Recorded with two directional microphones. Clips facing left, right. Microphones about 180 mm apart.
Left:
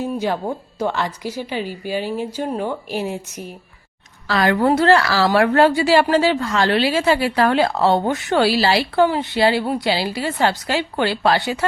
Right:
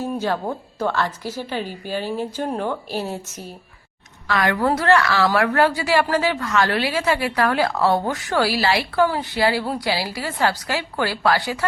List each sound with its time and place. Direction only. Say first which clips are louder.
0.0 s a woman's voice: left 2 dB; 15° left (ahead or behind)
4.3 s a woman's voice: left 3 dB; 30° left (ahead or behind)